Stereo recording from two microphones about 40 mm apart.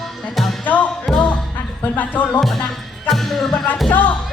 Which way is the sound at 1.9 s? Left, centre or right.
Left.